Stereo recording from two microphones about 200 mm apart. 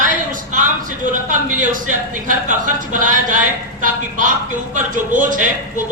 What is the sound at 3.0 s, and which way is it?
A woman's voice, 40° right (ahead or behind).